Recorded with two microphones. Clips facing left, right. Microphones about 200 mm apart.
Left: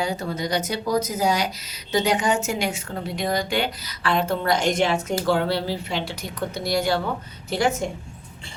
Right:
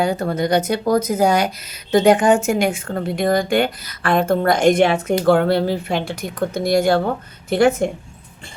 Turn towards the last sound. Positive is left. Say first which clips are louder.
# right 8 dB
turn(degrees=-55)  # may be behind; listen again after turning